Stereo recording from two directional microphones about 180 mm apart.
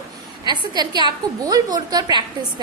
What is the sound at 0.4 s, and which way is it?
A woman's voice, 25° right (ahead or behind).